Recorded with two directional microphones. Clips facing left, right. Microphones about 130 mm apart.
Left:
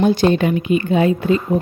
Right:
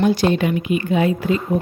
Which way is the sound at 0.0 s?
25° left (ahead or behind).